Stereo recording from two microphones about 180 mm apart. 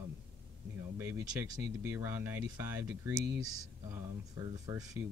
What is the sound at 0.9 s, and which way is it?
Speech, 10° right (ahead or behind).